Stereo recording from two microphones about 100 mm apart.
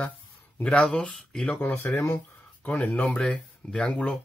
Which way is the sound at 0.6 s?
10° left (ahead or behind).